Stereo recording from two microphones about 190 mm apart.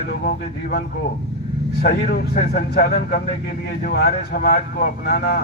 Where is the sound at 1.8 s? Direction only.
55° left (ahead or behind).